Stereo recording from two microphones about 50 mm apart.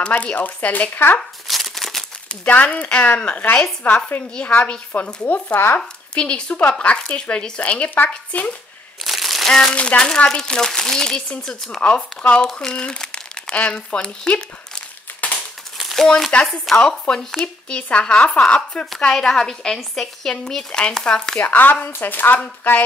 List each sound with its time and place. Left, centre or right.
0.0 s speech: left
1.5 s a sound: centre
2.2 s speech: left
3.8 s speech: left
4.4 s speech: left
5.2 s speech: left
5.8 s a woman's voice: centre
9.0 s crushing: centre
9.5 s speech: centre
9.8 s speech: left
11.8 s speech: left
15.2 s crumpling: left
16.3 s speech: left
21.4 s speech: left